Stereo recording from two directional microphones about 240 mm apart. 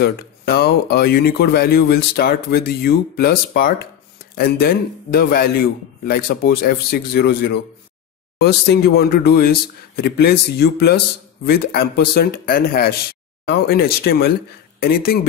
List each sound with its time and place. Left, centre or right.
0.0 s speech: left